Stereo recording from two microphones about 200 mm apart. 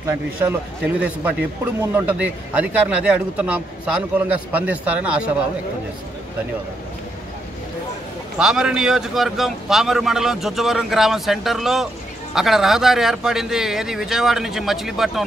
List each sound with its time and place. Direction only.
0.0 s a man's voice: 10° right (ahead or behind)
8.4 s a man's voice: 5° right (ahead or behind)